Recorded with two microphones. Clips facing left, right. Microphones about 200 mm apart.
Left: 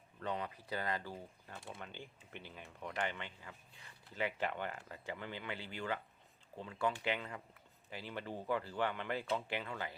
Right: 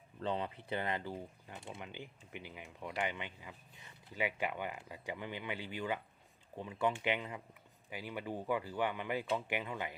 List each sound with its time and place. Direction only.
0.2 s speech: 30° right (ahead or behind)